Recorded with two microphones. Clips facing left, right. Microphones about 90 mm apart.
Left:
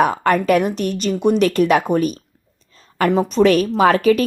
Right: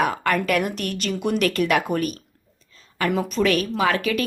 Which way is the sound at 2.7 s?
40° left (ahead or behind).